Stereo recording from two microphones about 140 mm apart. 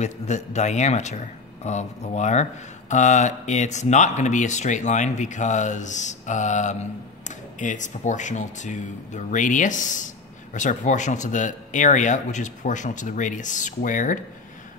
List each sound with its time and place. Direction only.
0.0 s speech: 55° left (ahead or behind)